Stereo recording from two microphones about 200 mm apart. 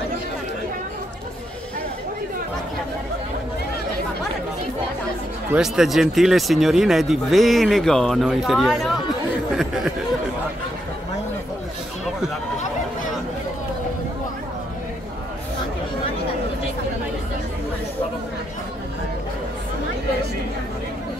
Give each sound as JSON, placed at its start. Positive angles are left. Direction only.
{"t": 5.5, "sound": "speech", "side_deg": 0}